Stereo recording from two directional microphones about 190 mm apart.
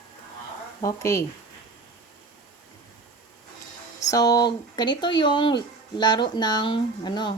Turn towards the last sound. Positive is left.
turn(degrees=25)  # may be behind; listen again after turning